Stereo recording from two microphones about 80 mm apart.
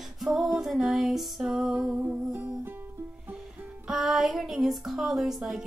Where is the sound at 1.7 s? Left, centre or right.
Centre.